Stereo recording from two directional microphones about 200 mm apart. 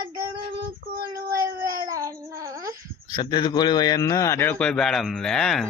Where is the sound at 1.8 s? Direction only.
15° right (ahead or behind).